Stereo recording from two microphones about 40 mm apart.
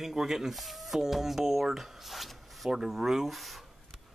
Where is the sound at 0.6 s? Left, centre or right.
Centre.